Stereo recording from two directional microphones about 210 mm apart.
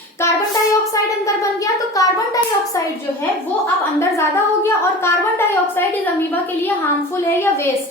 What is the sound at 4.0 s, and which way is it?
A woman's voice, 10° left (ahead or behind).